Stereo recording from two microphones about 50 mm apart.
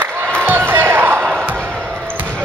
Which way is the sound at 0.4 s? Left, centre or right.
Right.